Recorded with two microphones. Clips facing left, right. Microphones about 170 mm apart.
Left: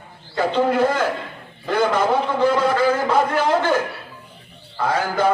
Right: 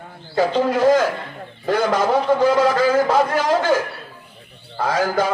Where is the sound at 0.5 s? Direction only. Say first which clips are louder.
Right 2 dB; 55° left (ahead or behind).